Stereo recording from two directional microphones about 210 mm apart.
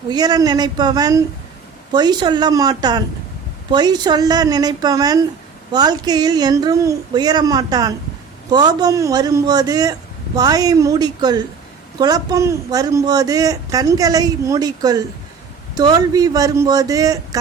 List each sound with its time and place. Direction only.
0.1 s a man's voice: 20° right (ahead or behind)